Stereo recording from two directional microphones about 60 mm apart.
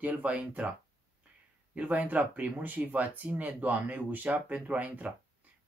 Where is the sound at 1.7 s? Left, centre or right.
Right.